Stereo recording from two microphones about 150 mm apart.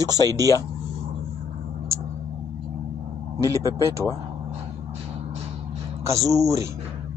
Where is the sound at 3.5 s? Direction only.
20° right (ahead or behind).